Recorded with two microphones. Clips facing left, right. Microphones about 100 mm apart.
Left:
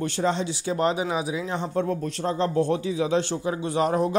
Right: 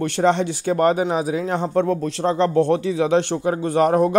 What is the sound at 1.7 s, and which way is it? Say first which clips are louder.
Speech: right 6 dB; 90° right.